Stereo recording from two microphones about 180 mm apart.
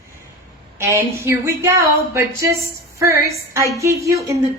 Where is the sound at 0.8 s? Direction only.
15° right (ahead or behind).